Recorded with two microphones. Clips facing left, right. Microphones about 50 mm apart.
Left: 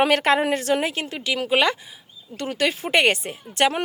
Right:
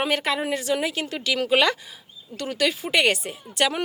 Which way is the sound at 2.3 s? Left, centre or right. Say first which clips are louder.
Left 1 dB; left.